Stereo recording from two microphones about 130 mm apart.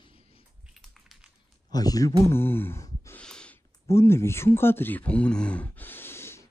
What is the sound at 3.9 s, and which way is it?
Speech, 20° left (ahead or behind).